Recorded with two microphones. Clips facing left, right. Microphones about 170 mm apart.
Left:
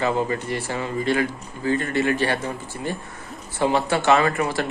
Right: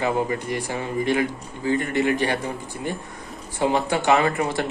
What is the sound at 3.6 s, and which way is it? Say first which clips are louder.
A man's voice: left 1 dB; 15° right (ahead or behind).